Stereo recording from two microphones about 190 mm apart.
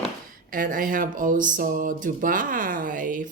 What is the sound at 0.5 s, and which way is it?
Speech, 45° right (ahead or behind).